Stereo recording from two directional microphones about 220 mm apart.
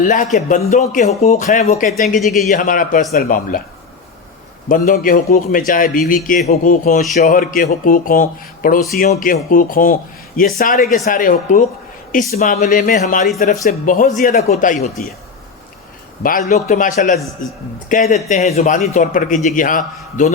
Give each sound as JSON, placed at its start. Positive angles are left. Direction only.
{"t": 0.0, "sound": "a man's voice", "side_deg": 35}
{"t": 2.2, "sound": "a man's voice", "side_deg": 0}
{"t": 2.5, "sound": "a man's voice", "side_deg": 40}
{"t": 4.7, "sound": "a man's voice", "side_deg": 40}
{"t": 16.2, "sound": "a man's voice", "side_deg": 35}